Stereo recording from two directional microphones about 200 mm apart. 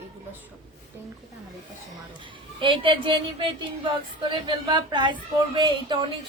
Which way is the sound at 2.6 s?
25° right (ahead or behind).